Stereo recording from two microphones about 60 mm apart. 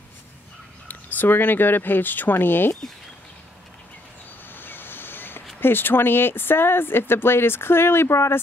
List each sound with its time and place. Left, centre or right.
0.8 s speech: left
4.6 s boat: left
5.6 s speech: left